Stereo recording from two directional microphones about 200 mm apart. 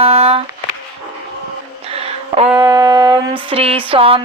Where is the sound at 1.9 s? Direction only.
30° right (ahead or behind).